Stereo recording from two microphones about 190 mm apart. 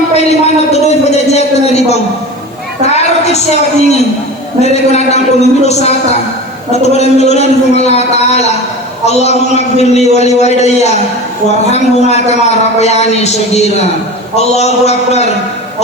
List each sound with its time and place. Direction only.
0.1 s a man's voice: 35° left (ahead or behind)